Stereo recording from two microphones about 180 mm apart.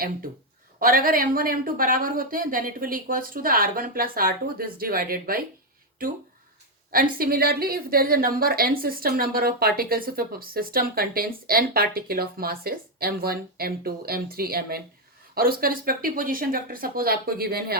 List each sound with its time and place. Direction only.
0.8 s a woman's voice: 50° right (ahead or behind)
6.9 s a woman's voice: 55° right (ahead or behind)